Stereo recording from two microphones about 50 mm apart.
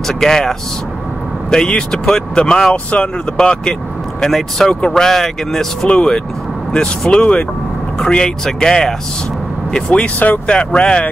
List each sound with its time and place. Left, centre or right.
0.2 s speech: centre
2.7 s speech: left
4.3 s speech: centre
4.6 s speech: centre
5.9 s speech: left